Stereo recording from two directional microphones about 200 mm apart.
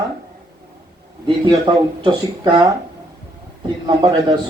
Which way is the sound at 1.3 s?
25° right (ahead or behind).